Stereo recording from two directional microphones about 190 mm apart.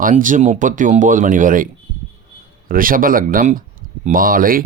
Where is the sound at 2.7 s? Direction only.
45° right (ahead or behind).